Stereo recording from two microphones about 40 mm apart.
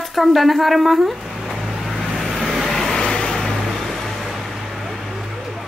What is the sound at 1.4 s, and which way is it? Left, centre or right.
Vehicle, centre.